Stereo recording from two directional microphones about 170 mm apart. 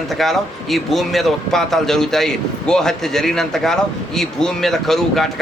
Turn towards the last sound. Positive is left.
turn(degrees=0)  # may be behind; listen again after turning